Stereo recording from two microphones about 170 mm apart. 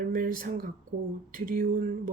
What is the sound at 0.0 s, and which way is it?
Speech, 55° right (ahead or behind).